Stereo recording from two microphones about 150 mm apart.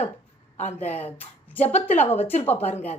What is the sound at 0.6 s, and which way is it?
Speech, 45° left (ahead or behind).